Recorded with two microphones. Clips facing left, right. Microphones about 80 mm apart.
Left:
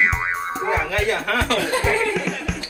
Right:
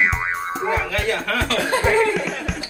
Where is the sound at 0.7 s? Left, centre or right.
Left.